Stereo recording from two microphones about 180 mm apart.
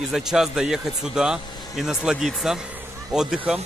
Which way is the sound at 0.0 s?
5° right (ahead or behind).